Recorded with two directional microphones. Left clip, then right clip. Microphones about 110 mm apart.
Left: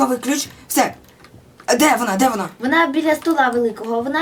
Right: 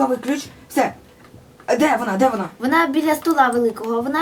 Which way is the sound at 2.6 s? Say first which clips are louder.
Left 1 dB; 30° right (ahead or behind).